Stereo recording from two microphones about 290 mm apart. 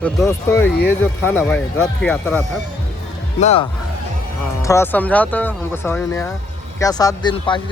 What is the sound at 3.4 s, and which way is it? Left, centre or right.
Speech, centre.